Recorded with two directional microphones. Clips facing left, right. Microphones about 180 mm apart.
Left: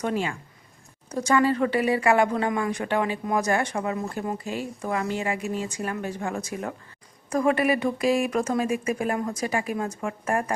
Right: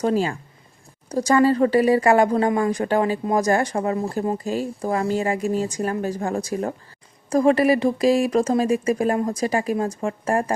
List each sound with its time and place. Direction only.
0.0 s a woman's voice: 35° right (ahead or behind)